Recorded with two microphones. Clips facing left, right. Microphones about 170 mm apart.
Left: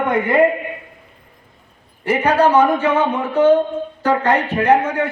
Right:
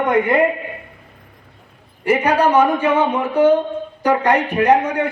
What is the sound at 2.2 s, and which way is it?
A man's voice, 10° right (ahead or behind).